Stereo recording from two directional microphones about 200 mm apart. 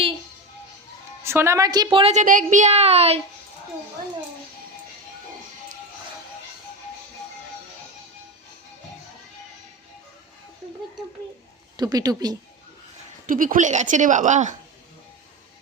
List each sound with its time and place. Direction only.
1.2 s a woman's voice: 15° right (ahead or behind); by 2.2 s 30° right (ahead or behind)
2.2 s a woman's voice: 40° right (ahead or behind)
11.8 s a woman's voice: 20° right (ahead or behind)
13.2 s a woman's voice: 45° right (ahead or behind)